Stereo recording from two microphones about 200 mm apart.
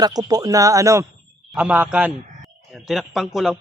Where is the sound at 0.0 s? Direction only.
20° right (ahead or behind).